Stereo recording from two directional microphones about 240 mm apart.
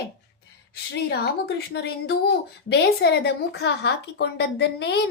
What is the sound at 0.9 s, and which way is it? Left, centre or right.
Speech, left.